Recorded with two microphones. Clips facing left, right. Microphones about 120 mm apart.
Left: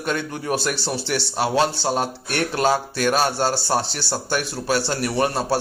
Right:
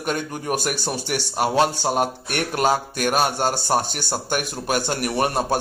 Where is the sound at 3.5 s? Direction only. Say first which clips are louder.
Right 1 dB; 15° right (ahead or behind).